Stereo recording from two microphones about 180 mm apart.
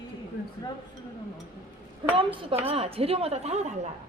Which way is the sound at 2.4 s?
30° right (ahead or behind).